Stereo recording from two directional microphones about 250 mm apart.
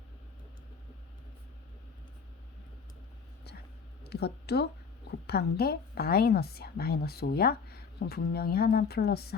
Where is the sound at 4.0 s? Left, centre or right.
Left.